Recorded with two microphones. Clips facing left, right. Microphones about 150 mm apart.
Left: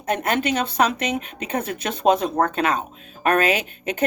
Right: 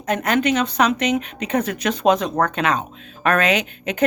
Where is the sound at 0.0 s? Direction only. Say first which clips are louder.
Right 3 dB; 30° left (ahead or behind).